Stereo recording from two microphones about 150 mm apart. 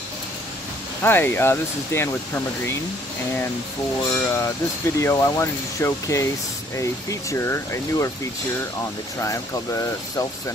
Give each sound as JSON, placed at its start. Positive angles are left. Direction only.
{"t": 1.0, "sound": "speech", "side_deg": 15}
{"t": 4.1, "sound": "speech", "side_deg": 15}
{"t": 9.2, "sound": "speech", "side_deg": 20}